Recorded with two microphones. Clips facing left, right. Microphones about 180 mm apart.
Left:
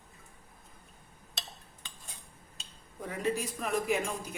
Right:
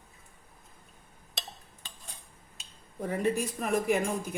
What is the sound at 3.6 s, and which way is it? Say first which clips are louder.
Speech: right 3 dB; 50° right (ahead or behind).